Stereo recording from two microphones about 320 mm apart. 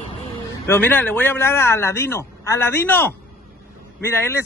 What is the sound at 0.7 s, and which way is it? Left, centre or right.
Speech, centre.